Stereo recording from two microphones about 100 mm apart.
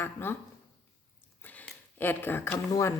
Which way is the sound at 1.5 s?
15° left (ahead or behind).